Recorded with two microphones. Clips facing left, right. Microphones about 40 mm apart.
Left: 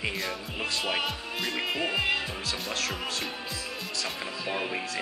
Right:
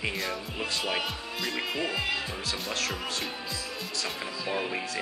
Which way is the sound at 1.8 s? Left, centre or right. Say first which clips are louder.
Left 4 dB; left.